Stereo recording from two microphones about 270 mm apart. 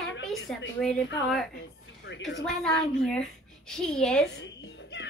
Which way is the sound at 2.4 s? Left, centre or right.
Centre.